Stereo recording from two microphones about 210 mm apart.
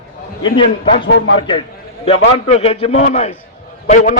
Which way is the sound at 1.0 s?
60° left (ahead or behind).